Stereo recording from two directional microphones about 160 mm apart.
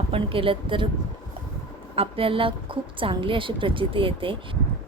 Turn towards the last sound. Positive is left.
turn(degrees=-35)  # may be behind; listen again after turning